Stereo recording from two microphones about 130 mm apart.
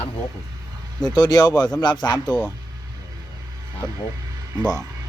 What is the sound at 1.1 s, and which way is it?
Speech, 35° left (ahead or behind).